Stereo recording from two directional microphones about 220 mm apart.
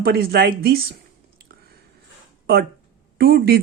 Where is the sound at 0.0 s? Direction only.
45° right (ahead or behind).